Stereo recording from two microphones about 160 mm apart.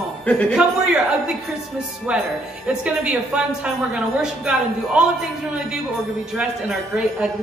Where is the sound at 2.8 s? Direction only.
5° right (ahead or behind).